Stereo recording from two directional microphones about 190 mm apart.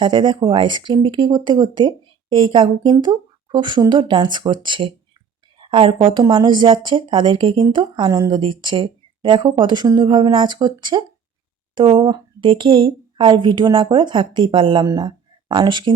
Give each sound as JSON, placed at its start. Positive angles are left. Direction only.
{"t": 0.0, "sound": "a woman's voice", "side_deg": -25}